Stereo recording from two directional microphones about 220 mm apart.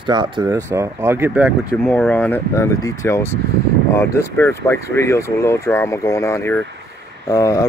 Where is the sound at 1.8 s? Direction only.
5° left (ahead or behind).